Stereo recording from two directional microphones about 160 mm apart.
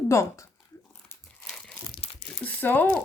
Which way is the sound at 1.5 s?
5° left (ahead or behind).